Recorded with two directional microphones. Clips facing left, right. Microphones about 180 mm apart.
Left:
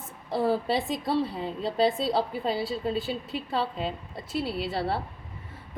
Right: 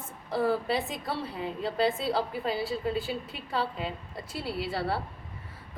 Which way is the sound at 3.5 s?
25° left (ahead or behind).